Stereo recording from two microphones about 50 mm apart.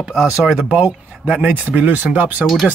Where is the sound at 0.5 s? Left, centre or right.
Right.